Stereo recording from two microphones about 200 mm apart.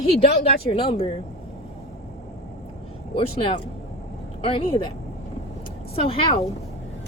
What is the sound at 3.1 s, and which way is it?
Speech, 25° left (ahead or behind).